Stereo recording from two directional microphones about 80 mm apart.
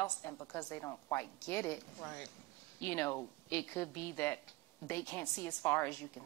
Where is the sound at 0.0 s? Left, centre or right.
Left.